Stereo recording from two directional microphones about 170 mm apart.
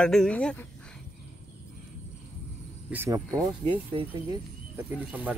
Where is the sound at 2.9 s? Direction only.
15° right (ahead or behind).